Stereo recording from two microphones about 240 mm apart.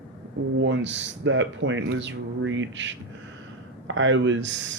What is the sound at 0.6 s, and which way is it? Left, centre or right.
Speech, right.